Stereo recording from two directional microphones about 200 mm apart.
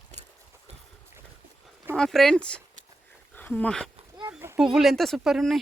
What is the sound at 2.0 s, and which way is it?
Speech, centre (ahead or behind).